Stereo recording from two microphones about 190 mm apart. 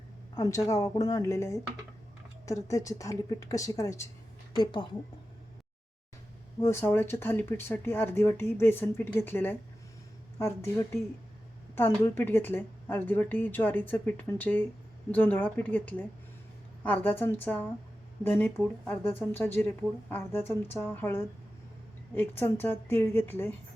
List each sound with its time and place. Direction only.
0.3 s a woman's voice: 15° left (ahead or behind)
6.6 s speech: 15° left (ahead or behind)